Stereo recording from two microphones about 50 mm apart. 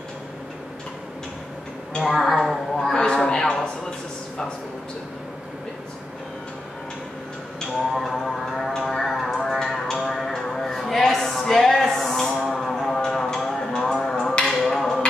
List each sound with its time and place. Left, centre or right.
2.0 s music: centre
2.9 s speech: centre
7.7 s music: centre
11.9 s a sound: centre